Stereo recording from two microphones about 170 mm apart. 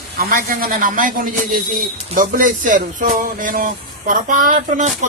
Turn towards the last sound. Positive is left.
turn(degrees=-45)  # may be behind; listen again after turning